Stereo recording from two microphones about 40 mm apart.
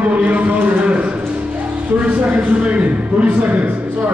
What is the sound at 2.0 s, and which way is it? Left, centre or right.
Speech, right.